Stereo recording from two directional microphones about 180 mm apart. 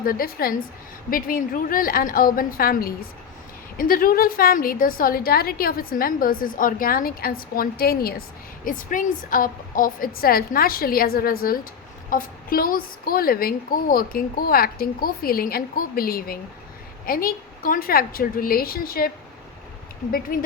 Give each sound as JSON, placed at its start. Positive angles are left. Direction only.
{"t": 0.0, "sound": "a woman's voice", "side_deg": 55}